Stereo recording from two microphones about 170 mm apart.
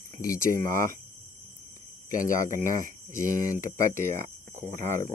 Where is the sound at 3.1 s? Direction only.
50° left (ahead or behind).